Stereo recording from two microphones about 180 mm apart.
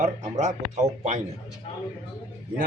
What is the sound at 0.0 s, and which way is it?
A man's voice, 40° right (ahead or behind).